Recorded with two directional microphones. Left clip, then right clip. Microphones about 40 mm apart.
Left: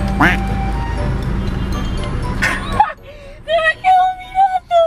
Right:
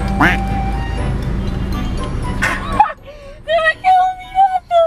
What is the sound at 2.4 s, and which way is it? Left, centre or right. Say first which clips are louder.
Bow-wow: right 1 dB; centre.